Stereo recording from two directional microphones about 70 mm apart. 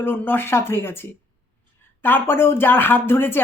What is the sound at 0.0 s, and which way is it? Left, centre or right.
Speech, left.